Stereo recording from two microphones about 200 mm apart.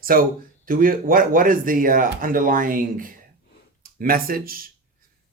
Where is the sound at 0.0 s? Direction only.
45° right (ahead or behind).